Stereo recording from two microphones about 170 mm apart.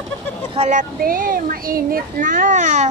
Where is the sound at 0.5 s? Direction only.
35° right (ahead or behind).